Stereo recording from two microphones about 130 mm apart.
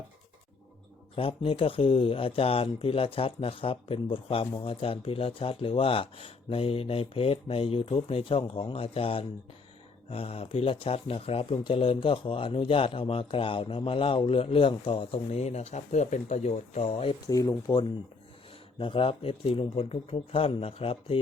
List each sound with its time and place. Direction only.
1.1 s speech: 45° left (ahead or behind)
17.2 s speech: 30° left (ahead or behind)
18.8 s speech: 45° left (ahead or behind)